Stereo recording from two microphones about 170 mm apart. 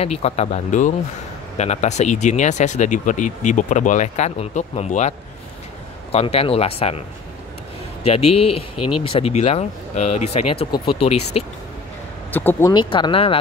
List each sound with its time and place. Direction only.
0.0 s speech: 35° left (ahead or behind)
6.1 s speech: 35° left (ahead or behind)
8.0 s speech: 35° left (ahead or behind)
12.3 s speech: 10° left (ahead or behind)
12.7 s speech: 30° left (ahead or behind)